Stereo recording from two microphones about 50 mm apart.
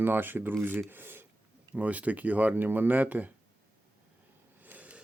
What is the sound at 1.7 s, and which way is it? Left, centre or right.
Speech, right.